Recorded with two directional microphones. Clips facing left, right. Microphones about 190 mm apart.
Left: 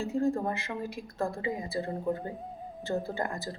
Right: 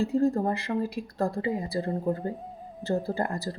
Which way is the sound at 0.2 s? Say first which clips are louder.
Even; 35° right (ahead or behind).